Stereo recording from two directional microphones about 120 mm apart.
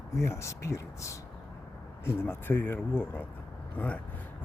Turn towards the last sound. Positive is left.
turn(degrees=20)  # may be behind; listen again after turning